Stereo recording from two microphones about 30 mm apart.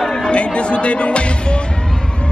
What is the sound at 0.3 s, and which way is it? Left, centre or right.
Speech, left.